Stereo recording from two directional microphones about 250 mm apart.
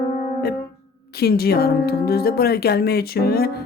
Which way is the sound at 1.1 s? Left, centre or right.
Left.